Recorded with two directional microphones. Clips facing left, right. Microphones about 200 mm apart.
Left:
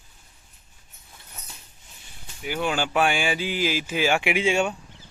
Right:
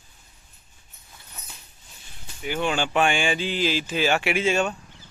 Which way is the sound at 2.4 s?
5° left (ahead or behind).